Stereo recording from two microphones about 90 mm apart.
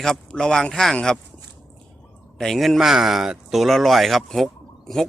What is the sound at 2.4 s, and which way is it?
A man's voice, centre (ahead or behind).